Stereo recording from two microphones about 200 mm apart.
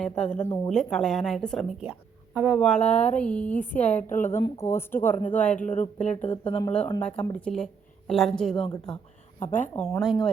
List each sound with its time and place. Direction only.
0.0 s speech: 5° left (ahead or behind)
2.6 s a woman's voice: 5° left (ahead or behind)
6.2 s speech: 25° left (ahead or behind)
6.7 s a woman's voice: 10° left (ahead or behind)